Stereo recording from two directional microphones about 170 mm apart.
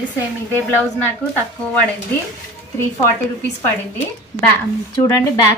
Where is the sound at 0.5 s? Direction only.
10° left (ahead or behind).